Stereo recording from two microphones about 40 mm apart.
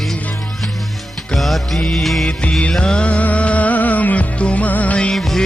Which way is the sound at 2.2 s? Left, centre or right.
Left.